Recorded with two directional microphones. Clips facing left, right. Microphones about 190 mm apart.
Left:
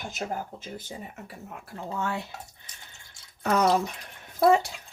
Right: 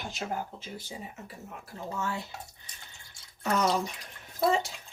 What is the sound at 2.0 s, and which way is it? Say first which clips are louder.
Speech: left 3 dB; 60° left (ahead or behind).